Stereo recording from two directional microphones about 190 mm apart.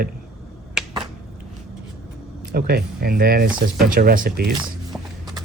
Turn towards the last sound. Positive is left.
turn(degrees=0)  # may be behind; listen again after turning